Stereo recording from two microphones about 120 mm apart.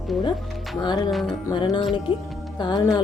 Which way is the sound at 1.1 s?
Centre (ahead or behind).